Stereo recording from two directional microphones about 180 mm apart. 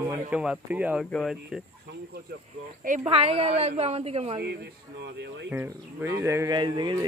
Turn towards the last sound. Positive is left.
turn(degrees=-25)  # may be behind; listen again after turning